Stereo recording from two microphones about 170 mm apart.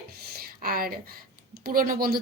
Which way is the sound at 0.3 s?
60° right (ahead or behind).